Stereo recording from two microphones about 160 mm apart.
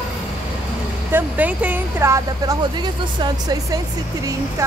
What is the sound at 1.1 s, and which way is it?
Speech, 10° right (ahead or behind).